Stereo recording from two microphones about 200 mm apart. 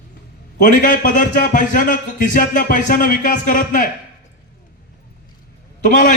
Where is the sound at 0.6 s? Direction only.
45° left (ahead or behind).